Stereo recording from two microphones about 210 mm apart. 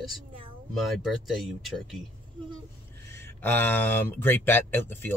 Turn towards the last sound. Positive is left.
turn(degrees=10)  # may be behind; listen again after turning